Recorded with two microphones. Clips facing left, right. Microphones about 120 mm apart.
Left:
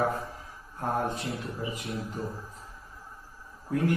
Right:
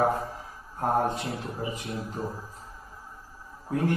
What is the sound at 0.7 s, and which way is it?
A man's voice, 35° right (ahead or behind).